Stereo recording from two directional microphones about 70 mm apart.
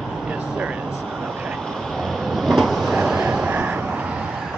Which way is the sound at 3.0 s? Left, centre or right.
Centre.